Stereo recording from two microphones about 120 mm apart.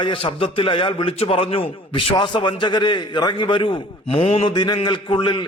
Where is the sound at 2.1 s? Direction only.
40° left (ahead or behind).